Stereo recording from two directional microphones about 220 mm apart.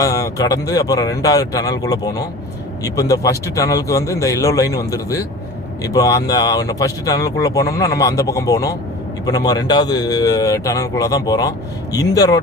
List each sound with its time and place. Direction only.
0.0 s speech: 15° left (ahead or behind)